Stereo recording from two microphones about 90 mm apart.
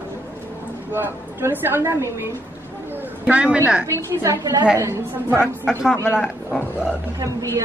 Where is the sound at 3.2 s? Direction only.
10° right (ahead or behind).